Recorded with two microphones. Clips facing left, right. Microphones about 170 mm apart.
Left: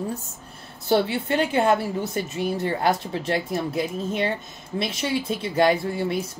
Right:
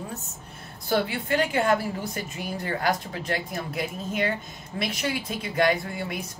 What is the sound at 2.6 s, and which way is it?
Speech, 30° left (ahead or behind).